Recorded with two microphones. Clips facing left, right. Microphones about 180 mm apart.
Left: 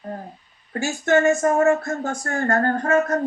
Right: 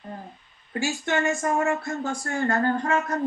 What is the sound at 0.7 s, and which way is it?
Speech, 45° left (ahead or behind).